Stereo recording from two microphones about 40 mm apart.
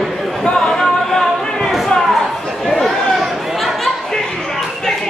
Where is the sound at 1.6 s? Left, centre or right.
Centre.